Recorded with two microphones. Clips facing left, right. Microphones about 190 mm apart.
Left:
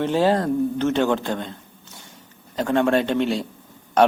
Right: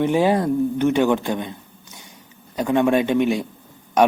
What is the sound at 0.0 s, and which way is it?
A man's voice, 15° right (ahead or behind).